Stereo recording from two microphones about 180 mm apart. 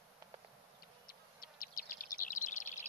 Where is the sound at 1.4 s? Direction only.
50° left (ahead or behind).